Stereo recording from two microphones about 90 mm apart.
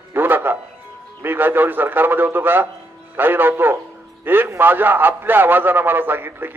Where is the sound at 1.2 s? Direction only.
25° right (ahead or behind).